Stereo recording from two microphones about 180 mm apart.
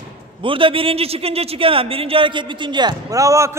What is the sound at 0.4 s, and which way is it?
A man's voice, 30° right (ahead or behind).